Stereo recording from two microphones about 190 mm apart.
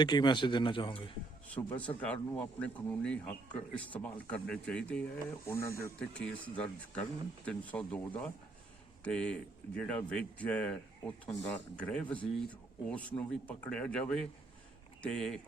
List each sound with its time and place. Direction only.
0.0 s a man's voice: 25° left (ahead or behind)
1.5 s a man's voice: 10° left (ahead or behind)